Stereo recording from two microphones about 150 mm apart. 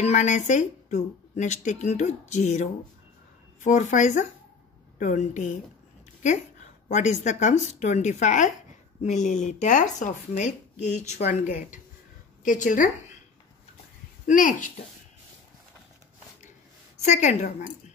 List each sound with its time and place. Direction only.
0.0 s a woman's voice: 50° left (ahead or behind)
6.9 s speech: 50° left (ahead or behind)
12.4 s a woman's voice: 55° left (ahead or behind)
14.2 s a woman's voice: 60° left (ahead or behind)
17.0 s speech: 50° left (ahead or behind)